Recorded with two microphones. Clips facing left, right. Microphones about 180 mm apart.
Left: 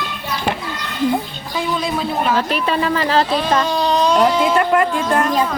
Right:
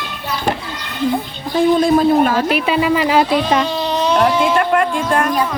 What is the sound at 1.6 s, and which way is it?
Speech, 50° right (ahead or behind).